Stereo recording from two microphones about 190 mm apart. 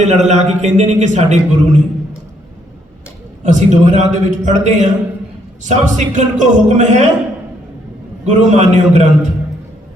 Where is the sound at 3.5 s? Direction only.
40° right (ahead or behind).